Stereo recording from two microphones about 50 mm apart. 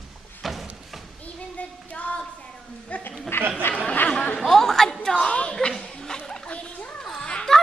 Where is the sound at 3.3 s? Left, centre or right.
Left.